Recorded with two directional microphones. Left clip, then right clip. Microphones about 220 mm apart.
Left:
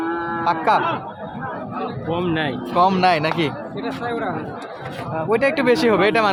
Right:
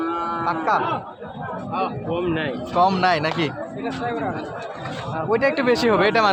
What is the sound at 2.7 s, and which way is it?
Speech, 10° left (ahead or behind).